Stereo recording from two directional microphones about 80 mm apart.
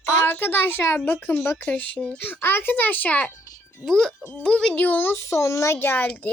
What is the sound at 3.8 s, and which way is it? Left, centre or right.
A child's voice, centre.